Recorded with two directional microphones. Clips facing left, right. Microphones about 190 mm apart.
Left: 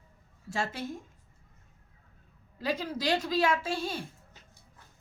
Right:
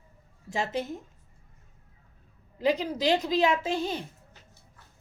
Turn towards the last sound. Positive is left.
turn(degrees=-20)  # may be behind; listen again after turning